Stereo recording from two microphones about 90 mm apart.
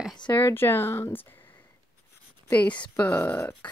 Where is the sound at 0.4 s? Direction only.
25° left (ahead or behind).